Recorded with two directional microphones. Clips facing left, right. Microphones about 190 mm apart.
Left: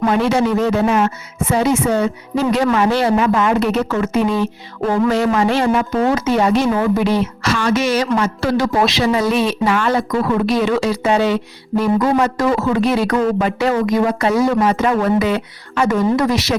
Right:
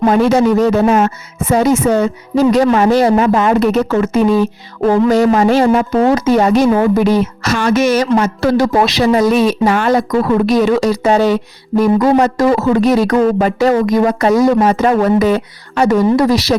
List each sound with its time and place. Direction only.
0.0 s speech: 40° right (ahead or behind)